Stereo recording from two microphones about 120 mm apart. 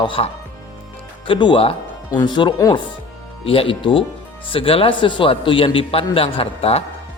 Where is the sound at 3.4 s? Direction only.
50° left (ahead or behind).